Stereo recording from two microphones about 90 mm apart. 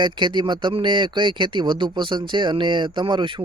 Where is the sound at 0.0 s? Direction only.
60° right (ahead or behind).